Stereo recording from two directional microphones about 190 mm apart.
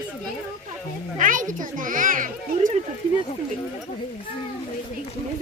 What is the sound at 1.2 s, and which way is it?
A child's voice, 45° right (ahead or behind).